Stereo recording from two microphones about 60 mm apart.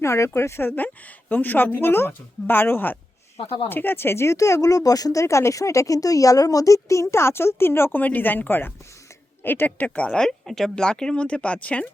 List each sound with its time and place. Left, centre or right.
0.0 s speech: left
4.4 s speech: left
5.2 s a woman's voice: left
7.9 s speech: left
10.1 s speech: centre